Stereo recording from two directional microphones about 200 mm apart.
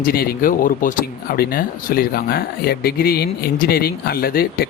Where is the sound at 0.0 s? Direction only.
45° left (ahead or behind).